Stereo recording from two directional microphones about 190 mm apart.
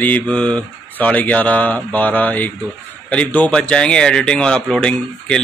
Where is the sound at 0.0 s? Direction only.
5° left (ahead or behind).